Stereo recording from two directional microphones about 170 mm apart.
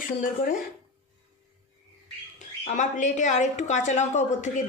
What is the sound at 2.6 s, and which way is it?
A woman's voice, 45° left (ahead or behind).